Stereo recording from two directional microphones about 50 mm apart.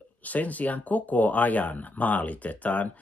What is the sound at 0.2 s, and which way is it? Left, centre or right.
Speech, left.